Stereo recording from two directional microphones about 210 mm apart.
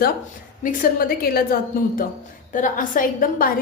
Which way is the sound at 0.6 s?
40° left (ahead or behind).